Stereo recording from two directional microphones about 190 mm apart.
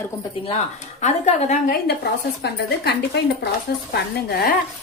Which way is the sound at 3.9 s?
55° left (ahead or behind).